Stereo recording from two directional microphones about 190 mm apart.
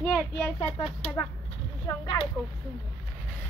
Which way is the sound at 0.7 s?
30° left (ahead or behind).